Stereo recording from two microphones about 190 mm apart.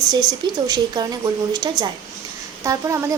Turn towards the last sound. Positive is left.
turn(degrees=-15)  # may be behind; listen again after turning